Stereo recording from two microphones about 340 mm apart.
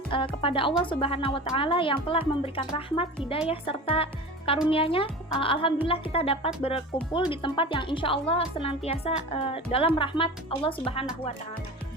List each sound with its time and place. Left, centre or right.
0.1 s a woman's voice: centre